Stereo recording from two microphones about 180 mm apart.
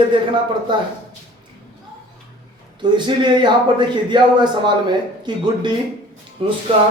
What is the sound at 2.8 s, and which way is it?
Speech, 25° right (ahead or behind).